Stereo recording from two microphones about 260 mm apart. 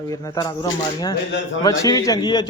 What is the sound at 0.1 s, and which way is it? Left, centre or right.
A man's voice, centre.